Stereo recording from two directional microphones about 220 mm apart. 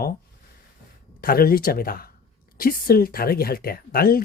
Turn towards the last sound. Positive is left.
turn(degrees=40)  # may be behind; listen again after turning